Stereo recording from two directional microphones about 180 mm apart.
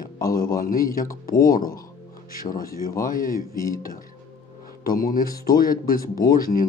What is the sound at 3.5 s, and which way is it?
Speech, 20° left (ahead or behind).